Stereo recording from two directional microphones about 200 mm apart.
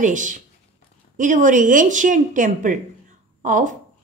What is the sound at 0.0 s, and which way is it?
A woman's voice, 40° right (ahead or behind).